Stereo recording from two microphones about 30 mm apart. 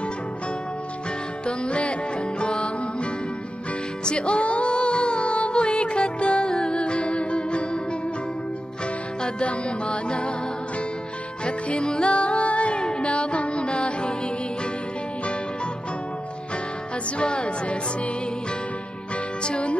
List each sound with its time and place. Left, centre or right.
1.4 s music: left
9.2 s music: left
11.4 s music: left
12.1 s music: left
17.2 s music: left
19.4 s music: left